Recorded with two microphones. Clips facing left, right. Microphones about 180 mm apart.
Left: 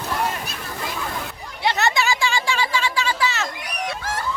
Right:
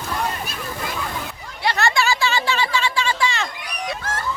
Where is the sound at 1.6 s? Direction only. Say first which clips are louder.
Right 1 dB; 20° left (ahead or behind).